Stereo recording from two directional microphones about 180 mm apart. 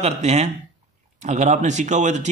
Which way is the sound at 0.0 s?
35° right (ahead or behind).